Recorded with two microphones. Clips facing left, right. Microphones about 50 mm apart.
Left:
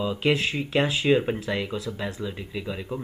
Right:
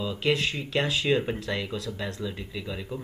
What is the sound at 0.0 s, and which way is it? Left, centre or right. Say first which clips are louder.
Speech: left 2 dB; left.